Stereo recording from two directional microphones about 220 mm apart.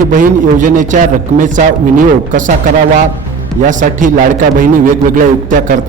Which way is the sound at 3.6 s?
35° right (ahead or behind).